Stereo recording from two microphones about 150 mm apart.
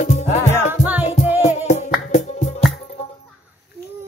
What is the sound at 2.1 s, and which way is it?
Music, 50° left (ahead or behind).